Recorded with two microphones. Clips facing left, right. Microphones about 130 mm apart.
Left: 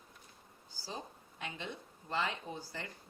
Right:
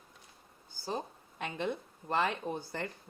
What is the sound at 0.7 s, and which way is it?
Speech, 55° right (ahead or behind).